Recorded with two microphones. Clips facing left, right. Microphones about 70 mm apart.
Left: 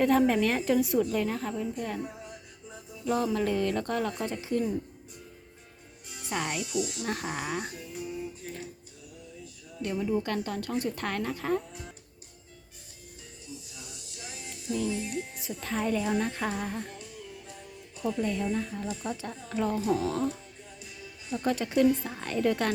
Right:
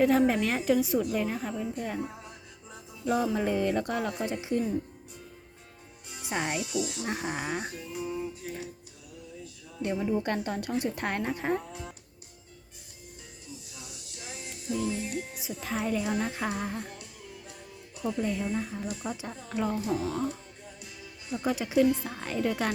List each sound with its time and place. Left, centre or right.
0.0 s a woman's voice: centre
3.3 s a woman's voice: centre
6.1 s speech: right
9.8 s speech: right
14.2 s music: right
15.4 s a woman's voice: centre
18.0 s a woman's voice: centre